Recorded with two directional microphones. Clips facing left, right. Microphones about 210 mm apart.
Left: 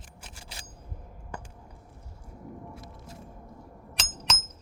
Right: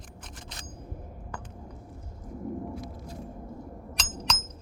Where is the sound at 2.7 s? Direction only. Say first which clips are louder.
Right 6 dB; 5° left (ahead or behind).